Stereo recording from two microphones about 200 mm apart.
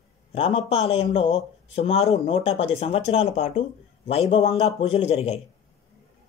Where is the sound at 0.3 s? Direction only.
30° left (ahead or behind).